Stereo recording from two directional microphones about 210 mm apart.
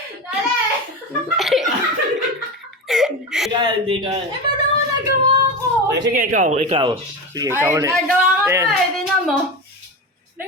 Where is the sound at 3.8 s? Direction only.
25° right (ahead or behind).